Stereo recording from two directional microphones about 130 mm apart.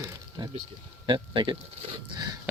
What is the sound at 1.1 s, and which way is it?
Speech, 40° right (ahead or behind).